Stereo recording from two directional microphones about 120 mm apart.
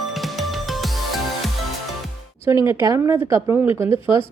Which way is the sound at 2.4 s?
20° right (ahead or behind).